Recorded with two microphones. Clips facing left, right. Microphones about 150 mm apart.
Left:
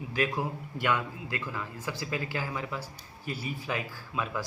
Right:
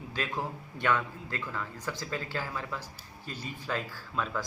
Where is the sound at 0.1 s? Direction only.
10° left (ahead or behind).